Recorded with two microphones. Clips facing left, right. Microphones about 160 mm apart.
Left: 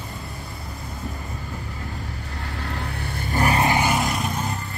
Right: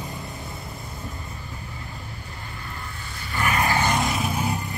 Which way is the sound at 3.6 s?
15° left (ahead or behind).